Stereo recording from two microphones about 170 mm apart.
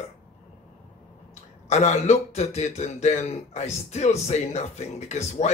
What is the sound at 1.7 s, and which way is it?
Speech, 40° left (ahead or behind).